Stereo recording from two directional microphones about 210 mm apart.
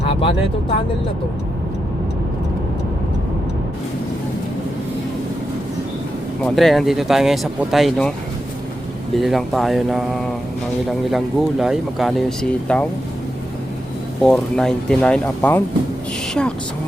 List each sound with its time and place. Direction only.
0.1 s a sound: 25° left (ahead or behind)
6.4 s speech: centre (ahead or behind)
9.1 s speech: centre (ahead or behind)
14.2 s speech: 5° left (ahead or behind)